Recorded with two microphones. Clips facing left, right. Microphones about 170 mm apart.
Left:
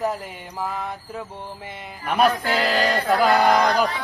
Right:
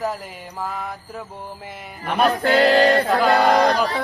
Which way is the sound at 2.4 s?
35° right (ahead or behind).